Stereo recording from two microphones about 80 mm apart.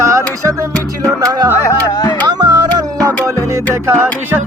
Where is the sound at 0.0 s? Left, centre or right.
Right.